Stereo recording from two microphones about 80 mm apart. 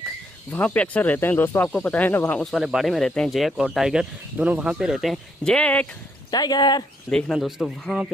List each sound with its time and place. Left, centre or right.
0.5 s speech: centre
2.4 s speech: centre
4.4 s speech: centre
6.3 s speech: left
7.1 s speech: centre
7.3 s speech: centre